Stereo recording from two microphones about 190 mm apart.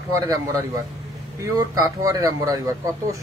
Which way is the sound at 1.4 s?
20° right (ahead or behind).